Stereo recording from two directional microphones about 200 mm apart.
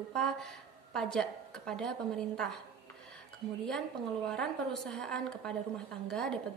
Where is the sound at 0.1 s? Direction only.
Centre (ahead or behind).